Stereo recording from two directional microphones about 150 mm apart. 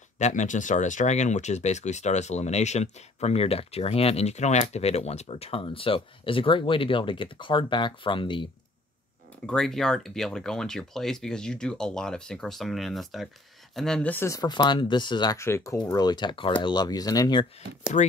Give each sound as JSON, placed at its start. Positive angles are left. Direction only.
{"t": 0.2, "sound": "speech", "side_deg": 55}
{"t": 9.5, "sound": "speech", "side_deg": 5}
{"t": 17.9, "sound": "speech", "side_deg": 50}